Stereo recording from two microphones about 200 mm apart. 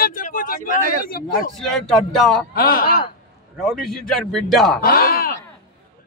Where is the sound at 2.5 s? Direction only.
50° left (ahead or behind).